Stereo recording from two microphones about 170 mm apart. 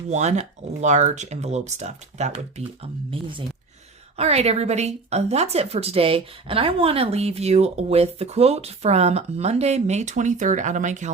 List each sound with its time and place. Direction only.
0.1 s speech: 40° right (ahead or behind)
4.2 s speech: 40° right (ahead or behind)